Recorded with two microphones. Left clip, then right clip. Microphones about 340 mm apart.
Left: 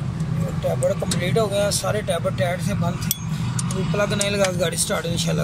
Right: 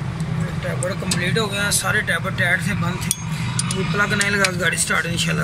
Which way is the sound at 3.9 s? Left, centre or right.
Centre.